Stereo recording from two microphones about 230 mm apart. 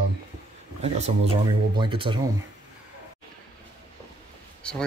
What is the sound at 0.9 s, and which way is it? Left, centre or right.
Speech, right.